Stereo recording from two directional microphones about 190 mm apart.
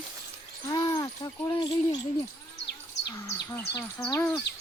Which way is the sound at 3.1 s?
15° left (ahead or behind).